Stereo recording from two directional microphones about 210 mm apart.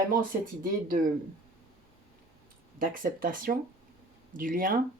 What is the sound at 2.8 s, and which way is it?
Speech, 40° right (ahead or behind).